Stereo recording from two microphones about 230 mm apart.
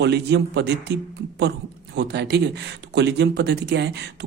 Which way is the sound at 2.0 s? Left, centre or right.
Right.